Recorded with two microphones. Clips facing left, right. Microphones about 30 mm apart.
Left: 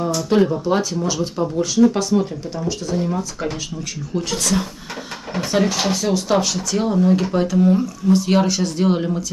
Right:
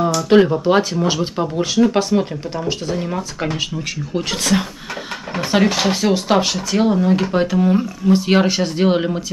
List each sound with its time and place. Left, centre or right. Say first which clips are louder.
0.3 s speech: right 4 dB; right